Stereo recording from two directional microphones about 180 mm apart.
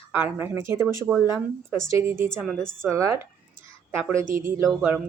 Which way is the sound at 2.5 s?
5° left (ahead or behind).